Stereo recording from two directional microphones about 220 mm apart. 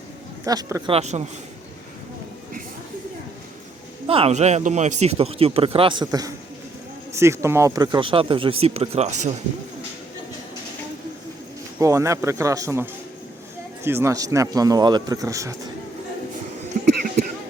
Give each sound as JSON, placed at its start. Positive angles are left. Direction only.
{"t": 0.4, "sound": "speech", "side_deg": -15}
{"t": 4.0, "sound": "speech", "side_deg": -25}
{"t": 7.1, "sound": "a sound", "side_deg": -10}
{"t": 7.4, "sound": "speech", "side_deg": -15}
{"t": 11.8, "sound": "a man's voice", "side_deg": -15}